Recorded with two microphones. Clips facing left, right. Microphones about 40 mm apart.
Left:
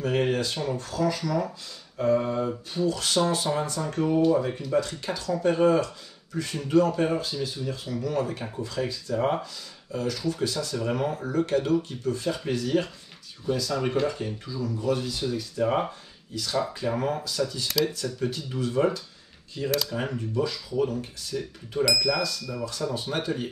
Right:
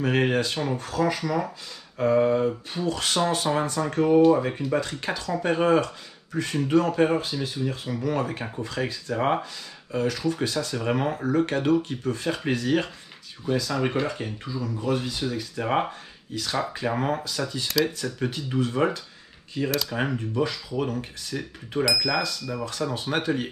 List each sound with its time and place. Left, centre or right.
0.0 s speech: right
6.5 s speech: right
6.8 s speech: right
22.7 s speech: right